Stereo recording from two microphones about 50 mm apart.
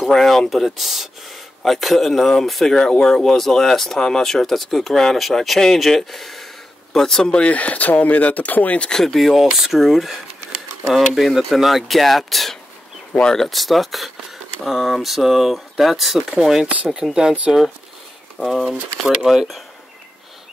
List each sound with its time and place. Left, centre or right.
0.0 s speech: centre; by 8.9 s left
8.9 s speech: centre
16.6 s speech: right
18.4 s speech: centre